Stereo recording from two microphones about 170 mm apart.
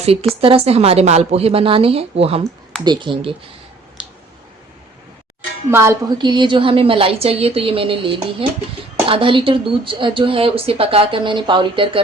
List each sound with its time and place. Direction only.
0.0 s a woman's voice: 35° right (ahead or behind)
4.0 s a sound: 5° right (ahead or behind)
5.7 s speech: 15° right (ahead or behind)